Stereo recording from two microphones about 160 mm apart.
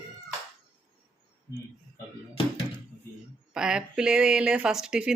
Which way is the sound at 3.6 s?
5° right (ahead or behind).